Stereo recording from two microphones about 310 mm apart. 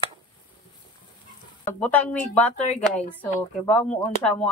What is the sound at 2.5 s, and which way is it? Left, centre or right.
Speech, left.